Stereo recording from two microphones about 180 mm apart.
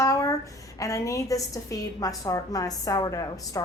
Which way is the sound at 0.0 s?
15° left (ahead or behind).